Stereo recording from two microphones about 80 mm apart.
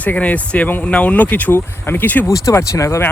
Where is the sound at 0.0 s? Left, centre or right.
Centre.